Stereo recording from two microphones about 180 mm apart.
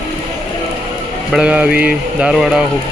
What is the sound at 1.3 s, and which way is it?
Speech, 5° right (ahead or behind).